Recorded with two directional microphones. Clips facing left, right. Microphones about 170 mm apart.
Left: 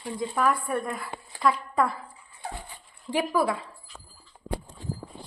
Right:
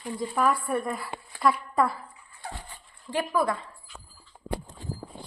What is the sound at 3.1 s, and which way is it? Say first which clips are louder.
Speech: left 1 dB; 10° left (ahead or behind).